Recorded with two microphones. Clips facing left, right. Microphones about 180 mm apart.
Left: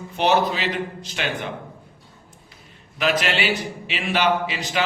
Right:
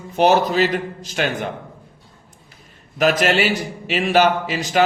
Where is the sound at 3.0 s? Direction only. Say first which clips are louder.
Right 5 dB; 45° right (ahead or behind).